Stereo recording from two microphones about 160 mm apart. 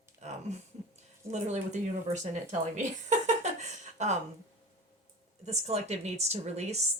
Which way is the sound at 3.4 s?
45° right (ahead or behind).